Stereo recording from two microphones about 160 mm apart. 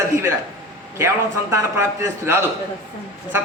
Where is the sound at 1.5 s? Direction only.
15° right (ahead or behind).